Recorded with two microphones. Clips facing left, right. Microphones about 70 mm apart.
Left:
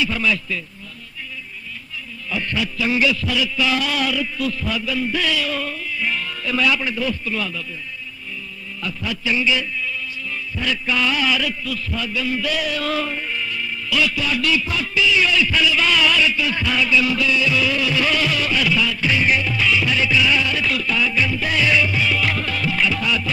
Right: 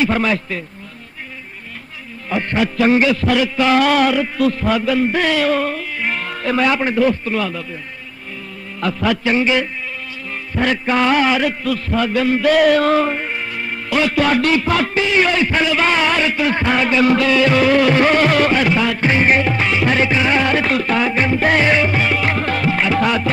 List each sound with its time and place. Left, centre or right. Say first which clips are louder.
0.0 s a man's voice: right 5 dB; right
2.2 s a man's voice: right 6 dB; right
8.8 s a man's voice: right 8 dB; right